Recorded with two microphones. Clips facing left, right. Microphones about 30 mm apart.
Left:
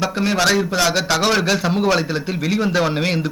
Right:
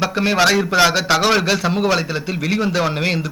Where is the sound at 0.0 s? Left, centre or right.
Centre.